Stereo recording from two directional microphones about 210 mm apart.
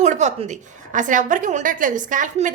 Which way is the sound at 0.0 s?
35° right (ahead or behind).